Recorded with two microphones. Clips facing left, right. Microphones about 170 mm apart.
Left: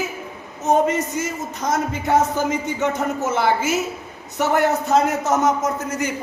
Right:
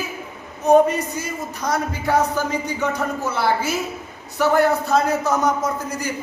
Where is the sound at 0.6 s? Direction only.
20° left (ahead or behind).